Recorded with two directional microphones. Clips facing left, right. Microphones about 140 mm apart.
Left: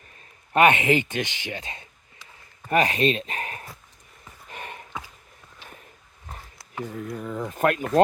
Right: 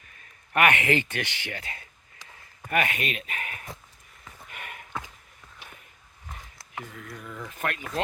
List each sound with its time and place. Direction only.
0.5 s speech: 25° left (ahead or behind)
4.4 s a sound: 30° left (ahead or behind)
6.9 s speech: 35° left (ahead or behind)